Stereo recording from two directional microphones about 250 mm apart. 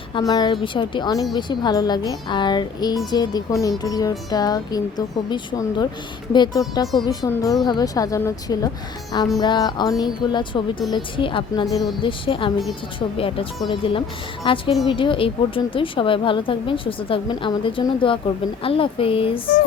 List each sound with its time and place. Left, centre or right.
0.1 s a woman's voice: centre